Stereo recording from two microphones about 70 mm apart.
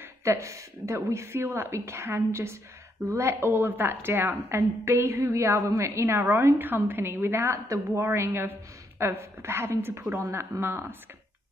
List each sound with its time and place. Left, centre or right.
0.2 s a woman's voice: right